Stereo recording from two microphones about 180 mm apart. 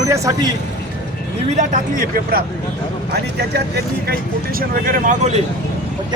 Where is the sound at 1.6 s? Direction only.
50° right (ahead or behind).